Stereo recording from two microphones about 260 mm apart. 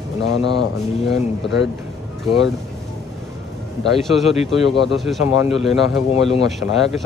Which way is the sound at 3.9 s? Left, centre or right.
Centre.